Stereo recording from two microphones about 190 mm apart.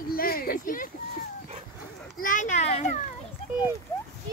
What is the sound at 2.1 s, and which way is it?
Children playing, 45° left (ahead or behind).